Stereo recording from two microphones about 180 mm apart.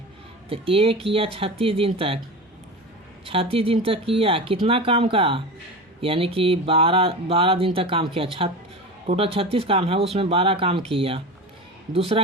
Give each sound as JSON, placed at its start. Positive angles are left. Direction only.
{"t": 0.5, "sound": "speech", "side_deg": -30}
{"t": 3.2, "sound": "speech", "side_deg": -30}